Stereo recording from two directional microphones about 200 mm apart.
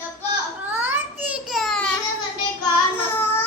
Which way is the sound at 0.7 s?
10° right (ahead or behind).